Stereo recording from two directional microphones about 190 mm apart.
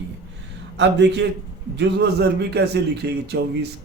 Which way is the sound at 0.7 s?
65° right (ahead or behind).